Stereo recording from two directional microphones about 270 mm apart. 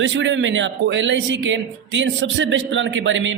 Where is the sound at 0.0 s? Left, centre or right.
Right.